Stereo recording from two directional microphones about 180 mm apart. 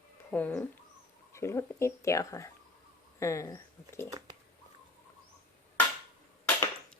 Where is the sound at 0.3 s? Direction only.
10° left (ahead or behind).